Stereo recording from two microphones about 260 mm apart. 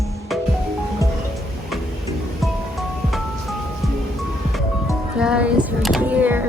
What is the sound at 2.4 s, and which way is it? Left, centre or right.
Music, centre.